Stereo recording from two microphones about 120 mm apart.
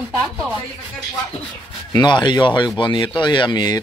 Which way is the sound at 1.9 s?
40° left (ahead or behind).